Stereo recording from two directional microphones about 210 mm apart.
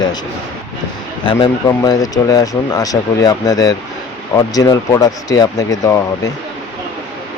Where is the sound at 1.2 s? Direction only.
20° left (ahead or behind).